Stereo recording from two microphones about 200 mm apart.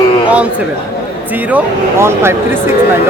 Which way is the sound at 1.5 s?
10° right (ahead or behind).